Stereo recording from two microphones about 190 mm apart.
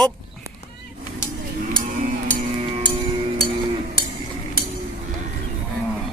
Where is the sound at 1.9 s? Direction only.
45° right (ahead or behind).